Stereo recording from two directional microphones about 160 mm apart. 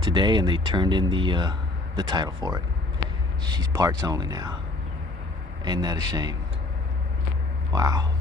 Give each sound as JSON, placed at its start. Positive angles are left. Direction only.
{"t": 0.0, "sound": "speech", "side_deg": -30}
{"t": 5.6, "sound": "speech", "side_deg": -25}
{"t": 7.7, "sound": "speech", "side_deg": -25}